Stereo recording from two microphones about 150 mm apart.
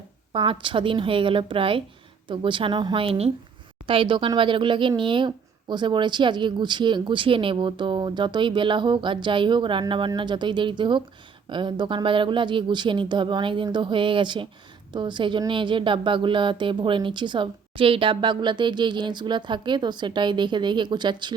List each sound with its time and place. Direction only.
0.3 s speech: 35° right (ahead or behind)